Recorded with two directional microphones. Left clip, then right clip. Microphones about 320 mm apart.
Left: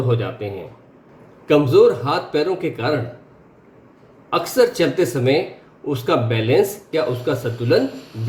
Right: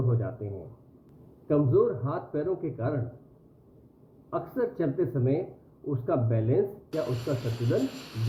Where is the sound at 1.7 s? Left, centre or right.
Centre.